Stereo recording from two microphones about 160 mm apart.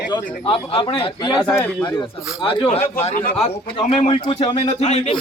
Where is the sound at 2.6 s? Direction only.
40° left (ahead or behind).